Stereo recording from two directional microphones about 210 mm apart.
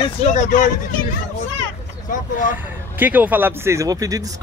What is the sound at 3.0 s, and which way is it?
Speech, 10° right (ahead or behind).